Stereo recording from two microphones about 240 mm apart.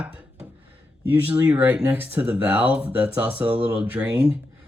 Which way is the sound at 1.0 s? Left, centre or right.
Centre.